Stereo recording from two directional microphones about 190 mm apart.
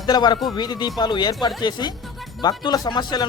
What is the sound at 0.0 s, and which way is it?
Speech, 20° left (ahead or behind).